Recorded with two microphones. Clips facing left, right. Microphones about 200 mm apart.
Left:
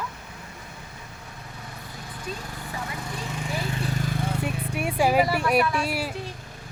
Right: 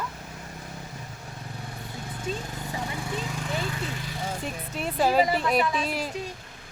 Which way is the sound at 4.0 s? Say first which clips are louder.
Left 5 dB; 55° left (ahead or behind).